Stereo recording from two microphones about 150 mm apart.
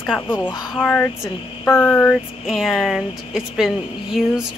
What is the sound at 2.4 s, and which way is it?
A woman's voice, centre (ahead or behind).